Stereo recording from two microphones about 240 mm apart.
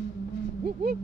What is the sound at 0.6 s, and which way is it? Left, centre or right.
Speech, right.